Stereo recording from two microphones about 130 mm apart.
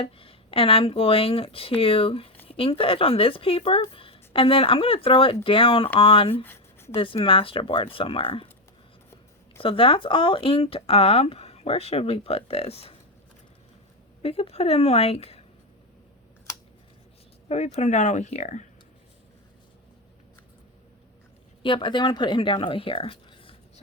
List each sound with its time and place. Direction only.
0.0 s speech: 45° left (ahead or behind)
6.3 s a sound: 15° left (ahead or behind)
6.9 s speech: 45° left (ahead or behind)
9.6 s speech: 45° left (ahead or behind)
14.2 s speech: 50° left (ahead or behind)
17.5 s speech: 60° left (ahead or behind)
21.6 s speech: 40° left (ahead or behind)